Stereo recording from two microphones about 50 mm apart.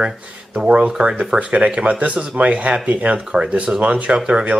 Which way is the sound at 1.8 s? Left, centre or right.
Right.